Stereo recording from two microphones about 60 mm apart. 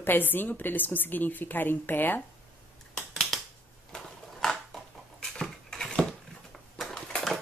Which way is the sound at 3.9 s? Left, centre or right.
Centre.